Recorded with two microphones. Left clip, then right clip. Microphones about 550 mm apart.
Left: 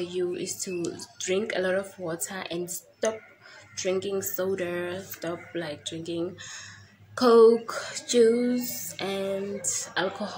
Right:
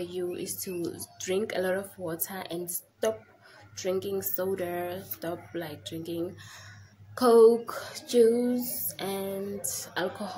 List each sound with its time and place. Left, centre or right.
0.0 s music: right